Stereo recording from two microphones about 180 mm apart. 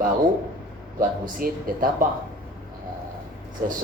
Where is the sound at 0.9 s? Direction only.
50° right (ahead or behind).